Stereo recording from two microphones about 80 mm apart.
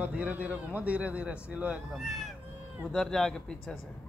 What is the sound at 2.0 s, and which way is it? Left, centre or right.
A man's voice, centre.